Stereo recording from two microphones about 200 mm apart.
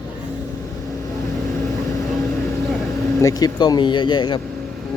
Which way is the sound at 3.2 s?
20° left (ahead or behind).